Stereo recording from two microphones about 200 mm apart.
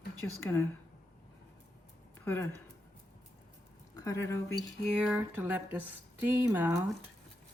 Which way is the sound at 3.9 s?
15° left (ahead or behind).